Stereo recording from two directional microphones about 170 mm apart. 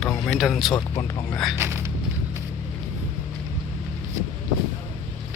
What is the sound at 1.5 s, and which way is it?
Speech, 15° right (ahead or behind).